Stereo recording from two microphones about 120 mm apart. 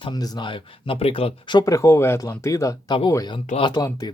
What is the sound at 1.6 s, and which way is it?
Speech, 25° left (ahead or behind).